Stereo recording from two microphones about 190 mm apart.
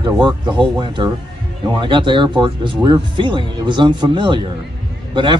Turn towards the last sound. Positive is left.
turn(degrees=-25)  # may be behind; listen again after turning